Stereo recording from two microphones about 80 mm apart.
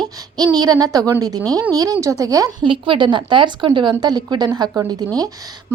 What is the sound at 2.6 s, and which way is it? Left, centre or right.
Speech, right.